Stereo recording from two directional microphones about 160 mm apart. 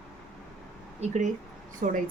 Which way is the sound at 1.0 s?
50° right (ahead or behind).